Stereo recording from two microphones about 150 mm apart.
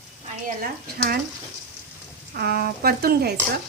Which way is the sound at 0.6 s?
90° right.